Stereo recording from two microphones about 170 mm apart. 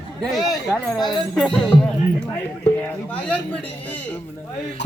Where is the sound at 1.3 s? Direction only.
5° left (ahead or behind).